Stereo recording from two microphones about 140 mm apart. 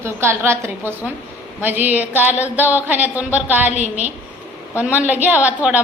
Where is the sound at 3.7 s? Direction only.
55° right (ahead or behind).